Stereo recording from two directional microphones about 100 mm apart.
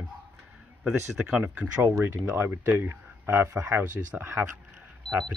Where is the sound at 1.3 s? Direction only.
20° right (ahead or behind).